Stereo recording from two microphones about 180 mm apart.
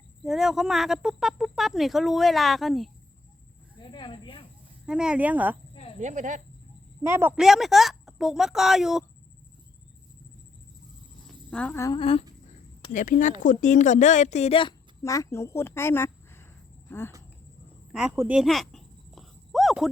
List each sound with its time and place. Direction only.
0.3 s speech: 5° right (ahead or behind)
3.8 s snake: 25° left (ahead or behind)
4.9 s speech: 5° right (ahead or behind)
6.0 s speech: 45° right (ahead or behind)
7.0 s speech: 15° right (ahead or behind)
7.4 s speech: centre (ahead or behind)
11.5 s a woman's voice: 10° left (ahead or behind)
11.9 s a sound: 30° left (ahead or behind)
12.9 s speech: 45° left (ahead or behind)
15.0 s a woman's voice: 15° left (ahead or behind)
17.9 s a sound: 10° right (ahead or behind)